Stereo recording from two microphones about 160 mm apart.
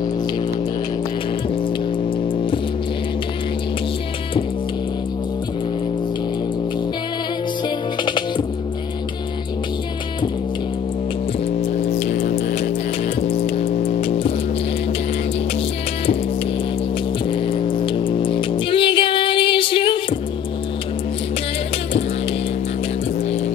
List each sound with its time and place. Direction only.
12.0 s music: 70° left (ahead or behind)
13.3 s music: 40° left (ahead or behind)
17.3 s music: 35° left (ahead or behind)